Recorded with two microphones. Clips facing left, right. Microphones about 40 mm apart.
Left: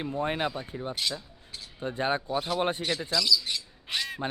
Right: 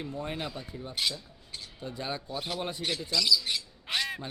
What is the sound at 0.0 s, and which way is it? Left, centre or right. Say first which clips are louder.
Speech: left 6 dB; left.